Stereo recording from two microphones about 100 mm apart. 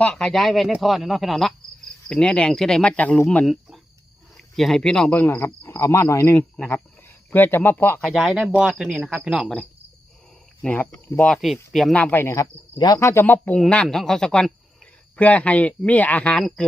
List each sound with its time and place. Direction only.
0.0 s speech: 5° left (ahead or behind); by 6.3 s 30° left (ahead or behind)
6.3 s speech: 15° left (ahead or behind)
8.1 s speech: centre (ahead or behind)
10.6 s speech: 15° left (ahead or behind)
11.3 s speech: centre (ahead or behind)
11.9 s speech: 15° left (ahead or behind)
12.2 s speech: 30° left (ahead or behind); by 16.4 s 15° left (ahead or behind)